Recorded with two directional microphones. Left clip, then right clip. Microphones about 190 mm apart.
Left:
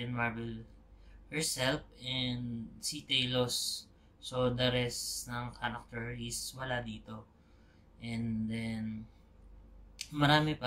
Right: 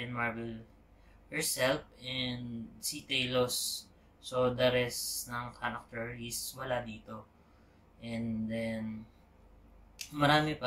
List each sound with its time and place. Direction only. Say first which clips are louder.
0.0 s speech: right 1 dB; 20° left (ahead or behind)
9.9 s speech: right 1 dB; 15° left (ahead or behind)